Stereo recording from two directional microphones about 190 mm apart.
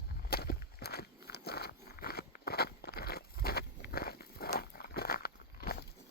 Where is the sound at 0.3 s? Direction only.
55° left (ahead or behind).